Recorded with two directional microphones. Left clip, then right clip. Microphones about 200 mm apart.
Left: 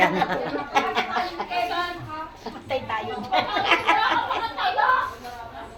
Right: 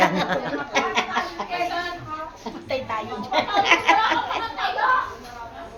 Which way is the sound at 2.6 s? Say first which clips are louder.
Even; 5° right (ahead or behind).